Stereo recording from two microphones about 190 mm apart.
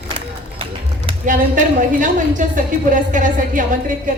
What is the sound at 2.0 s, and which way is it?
A woman's voice, 45° right (ahead or behind).